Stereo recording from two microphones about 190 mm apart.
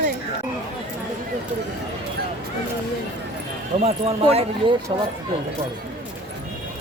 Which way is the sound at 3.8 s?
30° right (ahead or behind).